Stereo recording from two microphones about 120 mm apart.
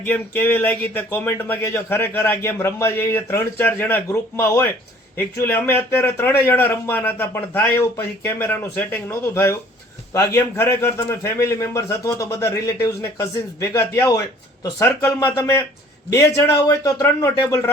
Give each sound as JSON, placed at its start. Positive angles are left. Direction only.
{"t": 0.0, "sound": "a man's voice", "side_deg": 15}